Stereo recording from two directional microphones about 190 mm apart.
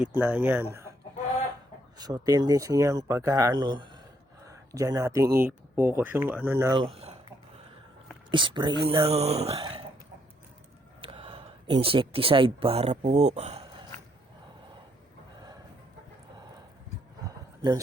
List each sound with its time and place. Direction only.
0.2 s speech: 10° right (ahead or behind)
2.0 s speech: 20° right (ahead or behind)
6.7 s speech: 30° right (ahead or behind)
8.3 s speech: 25° right (ahead or behind)
9.5 s speech: 25° right (ahead or behind)
11.0 s speech: 30° right (ahead or behind)